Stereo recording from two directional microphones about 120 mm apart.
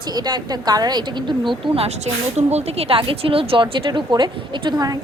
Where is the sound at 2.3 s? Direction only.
65° right (ahead or behind).